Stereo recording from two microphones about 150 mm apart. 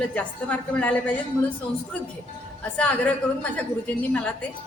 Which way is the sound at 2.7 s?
10° left (ahead or behind).